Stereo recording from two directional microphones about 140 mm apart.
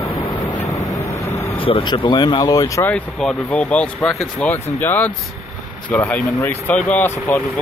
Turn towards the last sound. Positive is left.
turn(degrees=10)  # may be behind; listen again after turning